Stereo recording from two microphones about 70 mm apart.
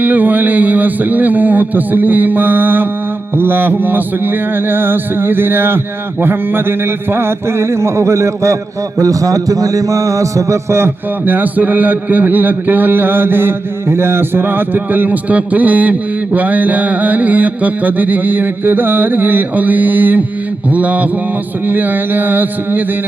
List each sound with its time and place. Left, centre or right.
0.0 s a man's voice: right
3.3 s music: right
9.0 s a man's voice: right